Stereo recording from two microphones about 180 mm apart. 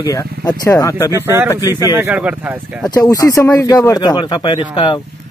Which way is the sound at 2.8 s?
20° left (ahead or behind).